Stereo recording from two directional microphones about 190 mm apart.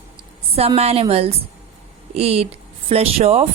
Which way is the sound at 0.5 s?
30° right (ahead or behind).